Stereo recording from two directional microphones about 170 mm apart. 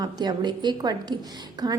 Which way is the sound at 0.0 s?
25° right (ahead or behind).